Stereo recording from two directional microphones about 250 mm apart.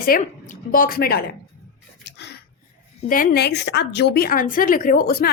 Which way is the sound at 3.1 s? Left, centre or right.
Left.